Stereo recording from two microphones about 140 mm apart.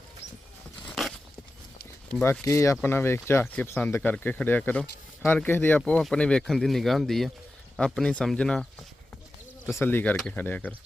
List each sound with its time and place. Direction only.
0.9 s a sound: centre (ahead or behind)
2.2 s speech: 20° left (ahead or behind); by 8.6 s 5° left (ahead or behind)
9.8 s speech: 15° left (ahead or behind)